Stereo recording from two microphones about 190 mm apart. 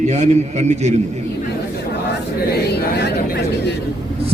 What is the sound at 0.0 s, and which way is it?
Speech, 35° right (ahead or behind).